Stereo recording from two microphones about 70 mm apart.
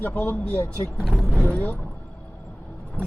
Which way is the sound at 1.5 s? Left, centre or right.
Left.